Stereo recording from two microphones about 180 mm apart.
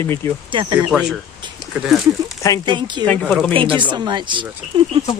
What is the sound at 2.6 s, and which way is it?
Speech, 25° right (ahead or behind).